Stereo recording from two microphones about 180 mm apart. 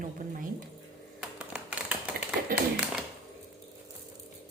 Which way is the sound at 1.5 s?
5° right (ahead or behind).